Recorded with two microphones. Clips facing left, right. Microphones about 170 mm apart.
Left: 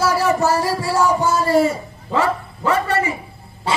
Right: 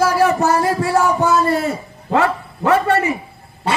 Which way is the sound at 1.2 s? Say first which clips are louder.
Even; 65° right (ahead or behind).